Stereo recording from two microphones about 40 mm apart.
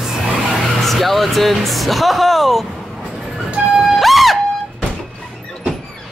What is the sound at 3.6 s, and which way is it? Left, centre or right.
Music, right.